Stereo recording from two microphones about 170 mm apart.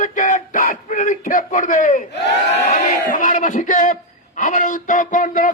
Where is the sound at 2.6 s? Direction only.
45° left (ahead or behind).